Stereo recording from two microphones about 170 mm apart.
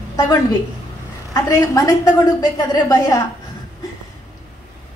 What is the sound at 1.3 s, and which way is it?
A woman's voice, 20° left (ahead or behind).